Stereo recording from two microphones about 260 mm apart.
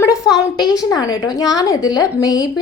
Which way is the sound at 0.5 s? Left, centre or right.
Centre.